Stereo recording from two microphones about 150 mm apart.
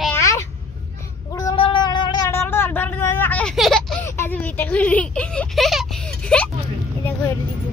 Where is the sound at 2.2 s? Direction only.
15° left (ahead or behind).